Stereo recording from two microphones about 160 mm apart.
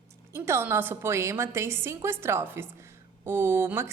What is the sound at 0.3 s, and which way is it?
A woman's voice, 15° right (ahead or behind).